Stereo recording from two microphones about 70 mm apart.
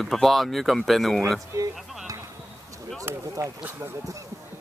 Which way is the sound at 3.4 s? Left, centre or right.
Right.